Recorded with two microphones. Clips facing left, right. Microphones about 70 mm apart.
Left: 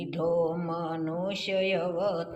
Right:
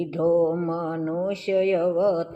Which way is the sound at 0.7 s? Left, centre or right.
Right.